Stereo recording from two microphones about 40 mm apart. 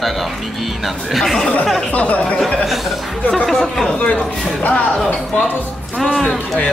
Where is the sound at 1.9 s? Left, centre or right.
Left.